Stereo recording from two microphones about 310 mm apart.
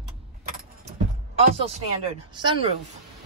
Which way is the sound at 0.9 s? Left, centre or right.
Right.